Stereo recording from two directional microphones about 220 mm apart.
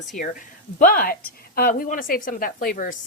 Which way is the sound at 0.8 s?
40° left (ahead or behind).